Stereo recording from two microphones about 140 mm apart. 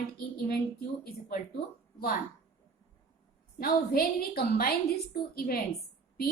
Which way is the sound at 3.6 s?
90° left.